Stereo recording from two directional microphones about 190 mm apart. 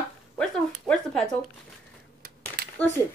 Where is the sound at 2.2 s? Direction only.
55° right (ahead or behind).